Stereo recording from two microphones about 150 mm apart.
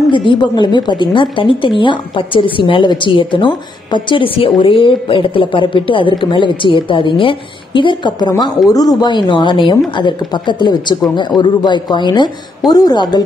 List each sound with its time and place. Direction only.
0.1 s a woman's voice: 35° left (ahead or behind)